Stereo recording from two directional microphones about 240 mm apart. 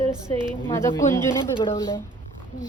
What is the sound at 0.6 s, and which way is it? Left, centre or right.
A woman's voice, centre.